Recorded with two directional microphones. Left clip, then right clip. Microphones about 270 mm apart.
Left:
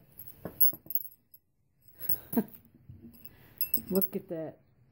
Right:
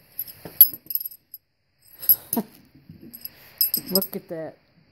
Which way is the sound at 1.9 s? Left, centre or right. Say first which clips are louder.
Right 5 dB; centre.